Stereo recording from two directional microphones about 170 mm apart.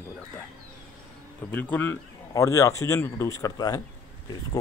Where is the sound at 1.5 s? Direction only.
10° left (ahead or behind).